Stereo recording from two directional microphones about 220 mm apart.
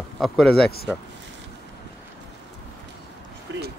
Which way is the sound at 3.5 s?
55° right (ahead or behind).